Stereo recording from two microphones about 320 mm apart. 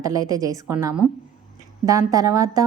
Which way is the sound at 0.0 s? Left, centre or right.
Centre.